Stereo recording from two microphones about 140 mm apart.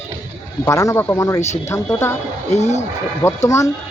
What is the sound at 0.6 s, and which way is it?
Speech, 20° left (ahead or behind).